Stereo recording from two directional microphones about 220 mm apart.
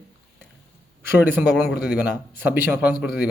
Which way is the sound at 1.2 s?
5° right (ahead or behind).